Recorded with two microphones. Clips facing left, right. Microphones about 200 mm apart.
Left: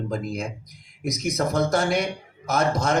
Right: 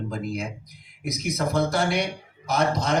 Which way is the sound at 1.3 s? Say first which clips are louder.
Left 1 dB; 45° left (ahead or behind).